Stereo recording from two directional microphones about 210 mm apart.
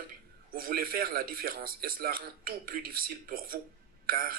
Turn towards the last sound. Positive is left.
turn(degrees=-45)  # may be behind; listen again after turning